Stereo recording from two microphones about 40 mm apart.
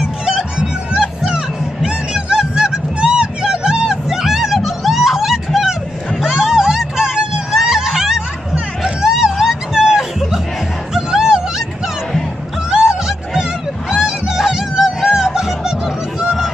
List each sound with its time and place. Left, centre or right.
0.0 s music: centre
6.2 s hubbub: centre
8.5 s music: centre
12.7 s music: centre